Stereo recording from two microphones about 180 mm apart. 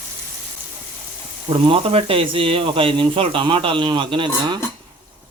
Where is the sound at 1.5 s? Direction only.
30° right (ahead or behind).